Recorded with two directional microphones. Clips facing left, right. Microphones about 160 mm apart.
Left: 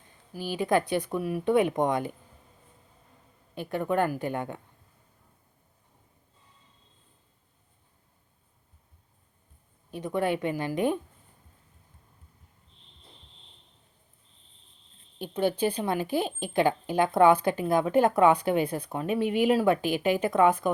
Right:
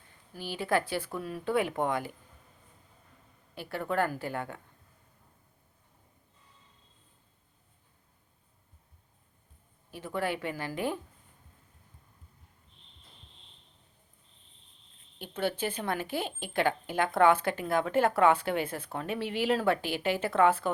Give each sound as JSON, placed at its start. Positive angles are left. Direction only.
{"t": 0.3, "sound": "speech", "side_deg": 15}
{"t": 3.5, "sound": "speech", "side_deg": 20}
{"t": 9.9, "sound": "speech", "side_deg": 20}
{"t": 15.2, "sound": "a woman's voice", "side_deg": 15}